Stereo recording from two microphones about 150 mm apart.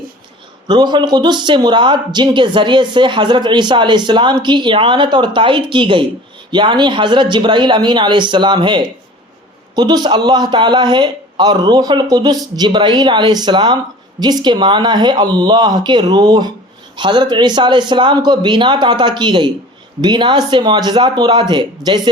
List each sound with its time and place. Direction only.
0.7 s a man's voice: 30° right (ahead or behind)